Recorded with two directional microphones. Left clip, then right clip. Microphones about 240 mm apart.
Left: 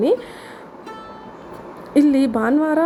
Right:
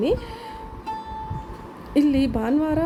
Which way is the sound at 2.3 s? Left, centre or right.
Centre.